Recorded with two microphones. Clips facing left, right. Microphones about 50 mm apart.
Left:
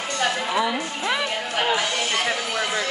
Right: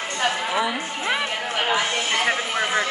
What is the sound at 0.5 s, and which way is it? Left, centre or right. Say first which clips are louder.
Speech: left 1 dB; centre.